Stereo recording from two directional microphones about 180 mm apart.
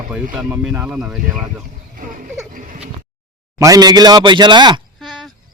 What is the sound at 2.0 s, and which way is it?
Speech, 45° right (ahead or behind).